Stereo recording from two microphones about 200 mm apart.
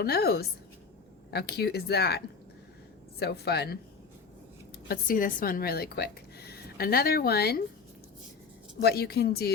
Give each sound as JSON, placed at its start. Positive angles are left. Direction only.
{"t": 0.0, "sound": "speech", "side_deg": 50}
{"t": 4.9, "sound": "a woman's voice", "side_deg": 45}
{"t": 8.8, "sound": "speech", "side_deg": 55}